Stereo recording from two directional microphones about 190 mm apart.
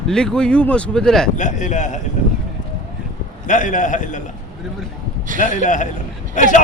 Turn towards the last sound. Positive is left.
turn(degrees=40)  # may be behind; listen again after turning